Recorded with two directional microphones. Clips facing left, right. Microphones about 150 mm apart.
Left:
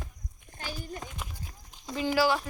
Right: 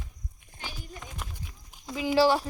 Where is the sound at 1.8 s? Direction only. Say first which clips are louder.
Left 1 dB; 5° right (ahead or behind).